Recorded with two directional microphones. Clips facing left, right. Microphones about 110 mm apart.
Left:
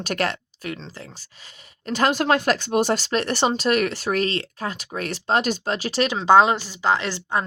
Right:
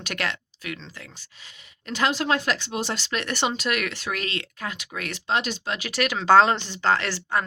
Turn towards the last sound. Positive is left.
turn(degrees=20)  # may be behind; listen again after turning